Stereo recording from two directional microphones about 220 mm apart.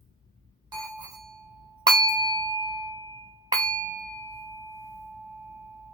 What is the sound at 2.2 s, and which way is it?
Glass, 20° right (ahead or behind).